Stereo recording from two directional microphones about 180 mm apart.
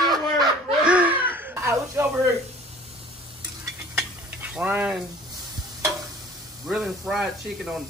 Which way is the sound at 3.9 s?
10° right (ahead or behind).